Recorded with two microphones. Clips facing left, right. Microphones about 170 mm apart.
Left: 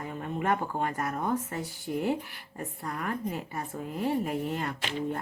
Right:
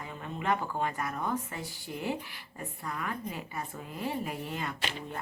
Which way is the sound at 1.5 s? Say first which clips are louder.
Left 6 dB; 50° left (ahead or behind).